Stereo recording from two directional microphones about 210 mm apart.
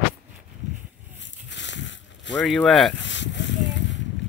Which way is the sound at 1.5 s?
60° left (ahead or behind).